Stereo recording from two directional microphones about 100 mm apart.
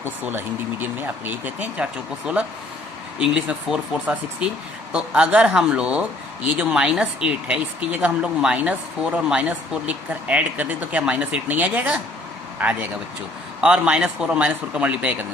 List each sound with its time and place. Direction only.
0.0 s speech: 20° right (ahead or behind)